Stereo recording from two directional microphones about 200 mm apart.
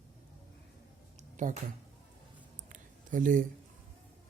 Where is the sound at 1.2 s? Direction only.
40° right (ahead or behind).